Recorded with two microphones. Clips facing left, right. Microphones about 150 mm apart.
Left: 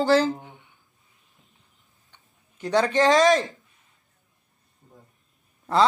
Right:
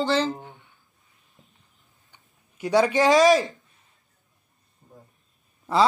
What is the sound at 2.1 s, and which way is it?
Speech, 10° right (ahead or behind).